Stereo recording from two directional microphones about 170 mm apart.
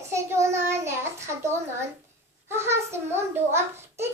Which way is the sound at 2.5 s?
15° right (ahead or behind).